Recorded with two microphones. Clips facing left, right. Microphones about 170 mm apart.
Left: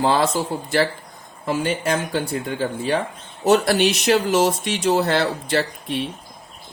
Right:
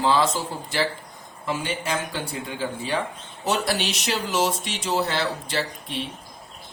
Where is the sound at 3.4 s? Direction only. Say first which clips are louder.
Left 8 dB; 50° left (ahead or behind).